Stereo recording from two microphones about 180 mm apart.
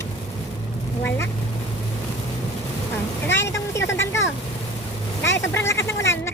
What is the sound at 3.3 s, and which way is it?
Vehicle, 80° left.